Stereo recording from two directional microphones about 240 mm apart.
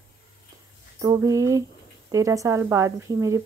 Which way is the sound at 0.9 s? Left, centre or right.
Centre.